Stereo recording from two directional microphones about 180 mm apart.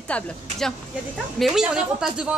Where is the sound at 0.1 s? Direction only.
5° left (ahead or behind).